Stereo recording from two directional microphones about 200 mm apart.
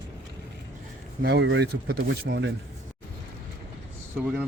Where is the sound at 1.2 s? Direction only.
60° right (ahead or behind).